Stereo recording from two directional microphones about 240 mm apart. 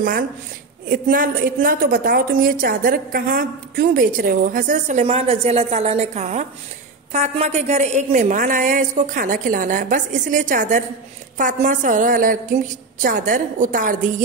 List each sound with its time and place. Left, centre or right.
0.8 s a woman's voice: right